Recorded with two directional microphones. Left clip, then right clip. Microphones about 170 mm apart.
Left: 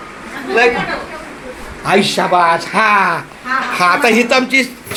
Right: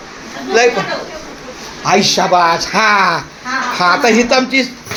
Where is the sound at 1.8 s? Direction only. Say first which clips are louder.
Right 1 dB; 20° right (ahead or behind).